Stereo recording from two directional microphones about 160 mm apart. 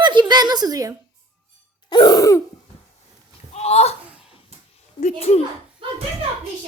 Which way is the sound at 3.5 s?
40° left (ahead or behind).